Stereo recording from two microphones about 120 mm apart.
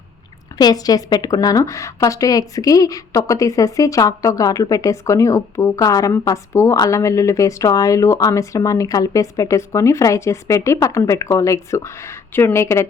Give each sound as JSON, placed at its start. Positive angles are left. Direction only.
{"t": 0.6, "sound": "a woman's voice", "side_deg": 30}